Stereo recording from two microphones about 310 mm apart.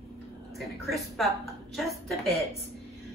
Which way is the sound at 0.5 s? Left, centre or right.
Centre.